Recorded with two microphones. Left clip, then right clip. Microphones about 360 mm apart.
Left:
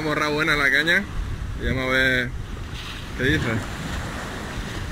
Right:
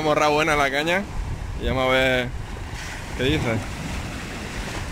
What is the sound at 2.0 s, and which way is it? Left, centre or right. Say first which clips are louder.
Speech: left 4 dB; right.